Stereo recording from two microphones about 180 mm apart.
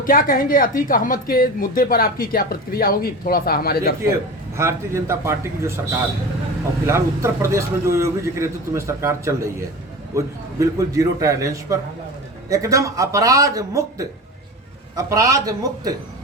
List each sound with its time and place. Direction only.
0.0 s a woman's voice: 50° left (ahead or behind)
4.5 s a man's voice: 15° right (ahead or behind)
6.8 s a man's voice: 15° right (ahead or behind)